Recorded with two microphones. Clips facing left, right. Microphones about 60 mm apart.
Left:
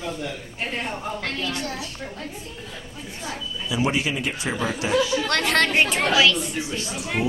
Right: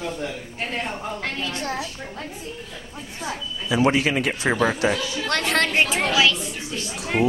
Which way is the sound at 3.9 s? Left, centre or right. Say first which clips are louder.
Right 4 dB; right.